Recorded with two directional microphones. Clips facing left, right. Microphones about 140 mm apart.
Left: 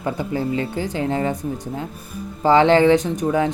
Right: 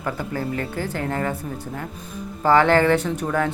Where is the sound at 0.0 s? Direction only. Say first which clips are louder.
Left 4 dB; 20° left (ahead or behind).